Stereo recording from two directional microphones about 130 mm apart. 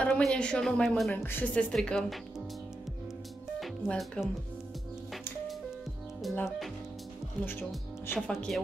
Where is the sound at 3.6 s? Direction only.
Centre (ahead or behind).